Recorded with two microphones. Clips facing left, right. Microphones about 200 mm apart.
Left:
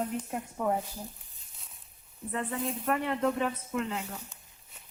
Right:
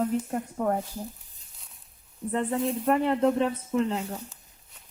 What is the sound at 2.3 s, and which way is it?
Speech, 35° right (ahead or behind).